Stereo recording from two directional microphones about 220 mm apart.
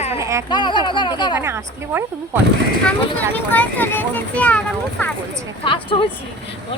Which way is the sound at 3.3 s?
10° left (ahead or behind).